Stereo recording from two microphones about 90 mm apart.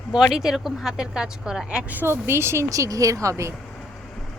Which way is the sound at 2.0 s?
25° right (ahead or behind).